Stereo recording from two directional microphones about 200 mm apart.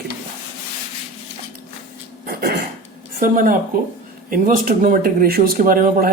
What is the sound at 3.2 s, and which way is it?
Speech, 45° right (ahead or behind).